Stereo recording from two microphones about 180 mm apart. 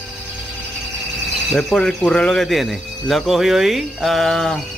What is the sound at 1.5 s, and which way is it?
Speech, 5° left (ahead or behind).